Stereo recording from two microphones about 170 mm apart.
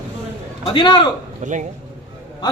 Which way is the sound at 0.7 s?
25° left (ahead or behind).